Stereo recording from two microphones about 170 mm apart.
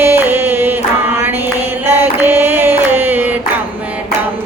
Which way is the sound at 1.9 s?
10° right (ahead or behind).